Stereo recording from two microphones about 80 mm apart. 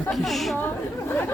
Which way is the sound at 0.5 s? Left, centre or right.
Left.